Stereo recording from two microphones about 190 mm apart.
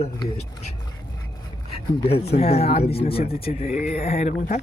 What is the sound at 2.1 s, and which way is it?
Speech, 30° left (ahead or behind).